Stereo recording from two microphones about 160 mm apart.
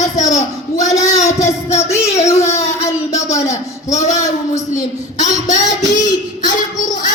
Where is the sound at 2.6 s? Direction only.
20° left (ahead or behind).